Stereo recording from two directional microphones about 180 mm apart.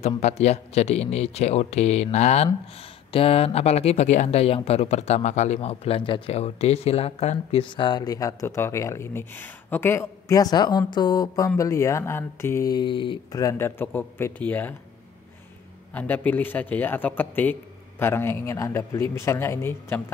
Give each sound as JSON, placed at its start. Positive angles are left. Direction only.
{"t": 0.2, "sound": "speech", "side_deg": 35}
{"t": 15.9, "sound": "a man's voice", "side_deg": 10}